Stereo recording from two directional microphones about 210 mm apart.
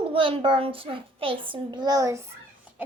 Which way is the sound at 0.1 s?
25° right (ahead or behind).